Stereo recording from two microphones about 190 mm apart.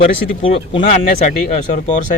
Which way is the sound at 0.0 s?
30° left (ahead or behind).